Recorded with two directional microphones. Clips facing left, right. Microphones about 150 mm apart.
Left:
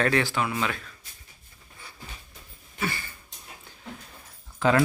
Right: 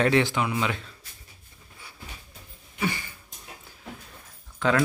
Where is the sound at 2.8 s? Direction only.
15° right (ahead or behind).